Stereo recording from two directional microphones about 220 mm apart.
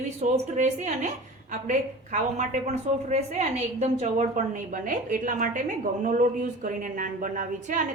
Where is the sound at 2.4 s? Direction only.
30° right (ahead or behind).